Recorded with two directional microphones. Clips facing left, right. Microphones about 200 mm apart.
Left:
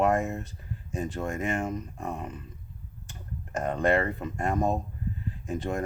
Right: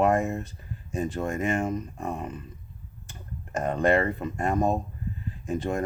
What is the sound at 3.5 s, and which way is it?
Speech, 25° right (ahead or behind).